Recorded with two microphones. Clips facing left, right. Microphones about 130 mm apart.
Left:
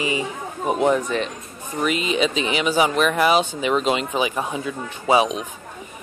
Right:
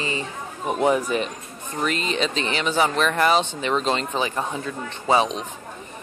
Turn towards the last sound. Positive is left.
turn(degrees=10)  # may be behind; listen again after turning